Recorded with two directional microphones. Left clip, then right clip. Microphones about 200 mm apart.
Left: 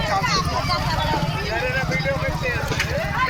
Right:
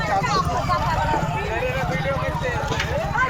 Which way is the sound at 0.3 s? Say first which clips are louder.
Right 1 dB; 35° left (ahead or behind).